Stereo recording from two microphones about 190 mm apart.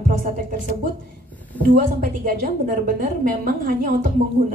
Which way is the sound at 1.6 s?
50° right (ahead or behind).